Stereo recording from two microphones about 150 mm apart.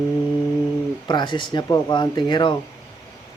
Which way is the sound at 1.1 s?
30° left (ahead or behind).